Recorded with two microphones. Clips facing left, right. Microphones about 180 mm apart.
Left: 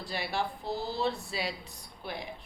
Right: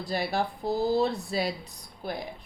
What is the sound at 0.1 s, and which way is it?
A woman's voice, 40° right (ahead or behind).